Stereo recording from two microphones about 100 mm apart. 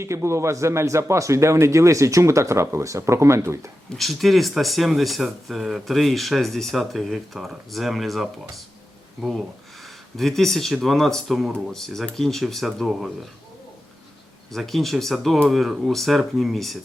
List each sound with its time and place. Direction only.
0.0 s a man's voice: 30° right (ahead or behind)
3.9 s speech: centre (ahead or behind)
14.5 s speech: centre (ahead or behind)